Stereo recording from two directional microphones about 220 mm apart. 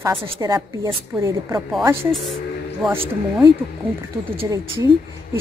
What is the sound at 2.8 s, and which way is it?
Speech, 5° right (ahead or behind).